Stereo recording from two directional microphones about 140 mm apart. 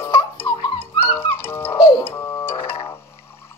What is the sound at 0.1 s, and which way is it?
Music, 30° left (ahead or behind).